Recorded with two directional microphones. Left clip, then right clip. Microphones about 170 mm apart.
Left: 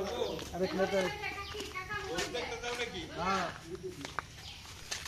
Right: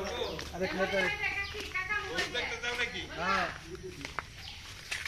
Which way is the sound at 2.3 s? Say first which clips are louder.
Right 3 dB; 90° left.